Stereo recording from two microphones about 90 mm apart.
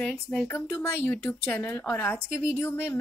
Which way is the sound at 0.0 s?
5° left (ahead or behind).